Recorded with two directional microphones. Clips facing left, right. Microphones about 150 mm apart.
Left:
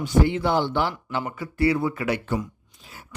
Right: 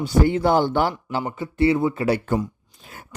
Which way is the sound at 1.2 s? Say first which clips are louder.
Right 3 dB; 25° right (ahead or behind).